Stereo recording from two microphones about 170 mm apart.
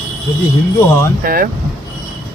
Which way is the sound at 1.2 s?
60° right (ahead or behind).